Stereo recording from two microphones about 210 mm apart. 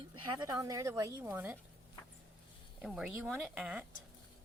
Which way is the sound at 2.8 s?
Centre (ahead or behind).